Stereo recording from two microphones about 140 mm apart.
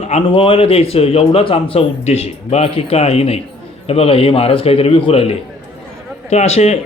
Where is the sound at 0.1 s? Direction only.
45° left (ahead or behind).